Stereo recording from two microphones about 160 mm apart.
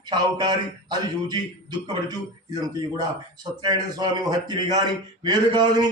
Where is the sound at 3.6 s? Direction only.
25° right (ahead or behind).